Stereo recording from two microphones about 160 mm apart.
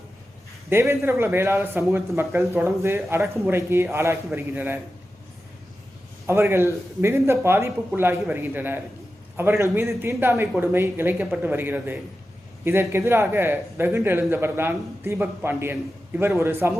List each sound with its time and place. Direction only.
0.7 s a man's voice: 15° right (ahead or behind)
6.2 s a man's voice: 15° right (ahead or behind)